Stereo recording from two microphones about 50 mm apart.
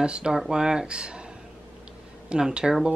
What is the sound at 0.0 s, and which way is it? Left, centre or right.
Speech, centre.